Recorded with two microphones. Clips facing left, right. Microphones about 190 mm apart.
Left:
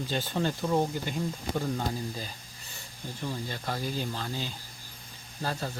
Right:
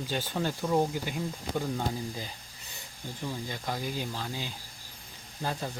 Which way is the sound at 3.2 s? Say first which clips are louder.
Left 1 dB; 10° right (ahead or behind).